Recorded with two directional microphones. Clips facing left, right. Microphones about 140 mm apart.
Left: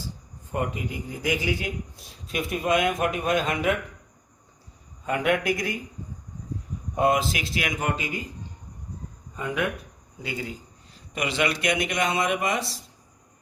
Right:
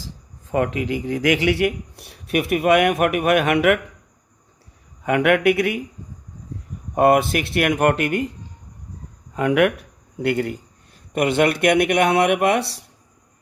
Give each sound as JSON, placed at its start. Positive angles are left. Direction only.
{"t": 0.0, "sound": "speech", "side_deg": -90}
{"t": 5.0, "sound": "speech", "side_deg": -70}
{"t": 6.9, "sound": "speech", "side_deg": -60}
{"t": 9.3, "sound": "speech", "side_deg": -80}